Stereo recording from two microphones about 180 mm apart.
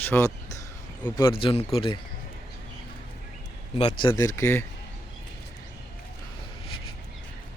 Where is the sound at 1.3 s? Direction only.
30° left (ahead or behind).